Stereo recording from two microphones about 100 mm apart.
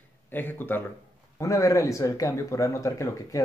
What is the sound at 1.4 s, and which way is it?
Speech, 35° left (ahead or behind).